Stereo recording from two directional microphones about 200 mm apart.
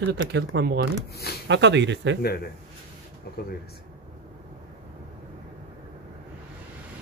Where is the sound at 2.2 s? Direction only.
50° left (ahead or behind).